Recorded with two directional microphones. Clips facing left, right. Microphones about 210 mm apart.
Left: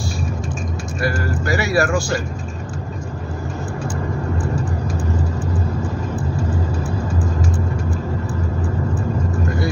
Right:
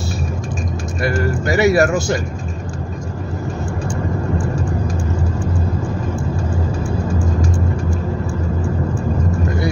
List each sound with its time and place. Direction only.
1.4 s speech: 20° right (ahead or behind)